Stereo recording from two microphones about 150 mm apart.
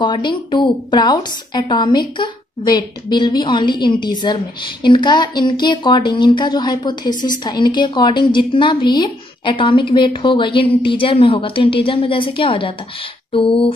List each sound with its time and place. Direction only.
0.0 s a woman's voice: 30° left (ahead or behind)